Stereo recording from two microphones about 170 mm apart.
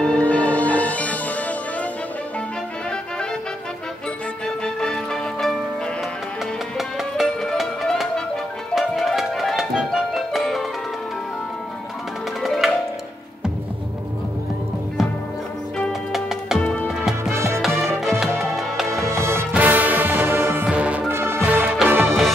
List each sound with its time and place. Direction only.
0.0 s music: 5° left (ahead or behind)
4.6 s music: 5° left (ahead or behind)
6.8 s music: centre (ahead or behind)
12.4 s music: centre (ahead or behind)
15.8 s music: centre (ahead or behind)
16.5 s music: 10° left (ahead or behind)
17.2 s music: 15° right (ahead or behind)
17.5 s music: centre (ahead or behind)
18.3 s music: 15° right (ahead or behind); by 22.3 s centre (ahead or behind)